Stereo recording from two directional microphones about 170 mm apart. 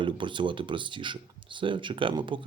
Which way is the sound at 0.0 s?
30° right (ahead or behind).